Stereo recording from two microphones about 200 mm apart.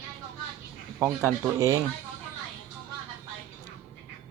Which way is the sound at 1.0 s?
10° right (ahead or behind).